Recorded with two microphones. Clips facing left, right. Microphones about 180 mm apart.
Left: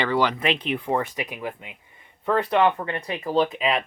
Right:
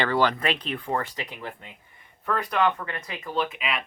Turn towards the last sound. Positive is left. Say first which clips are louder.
# left 7 dB
turn(degrees=35)  # may be behind; listen again after turning